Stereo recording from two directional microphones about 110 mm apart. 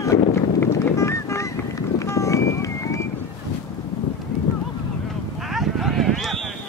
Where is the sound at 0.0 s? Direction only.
25° left (ahead or behind).